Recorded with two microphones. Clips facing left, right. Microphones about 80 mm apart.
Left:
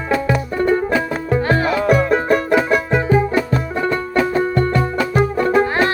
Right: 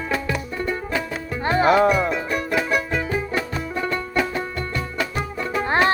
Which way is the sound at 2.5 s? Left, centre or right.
Left.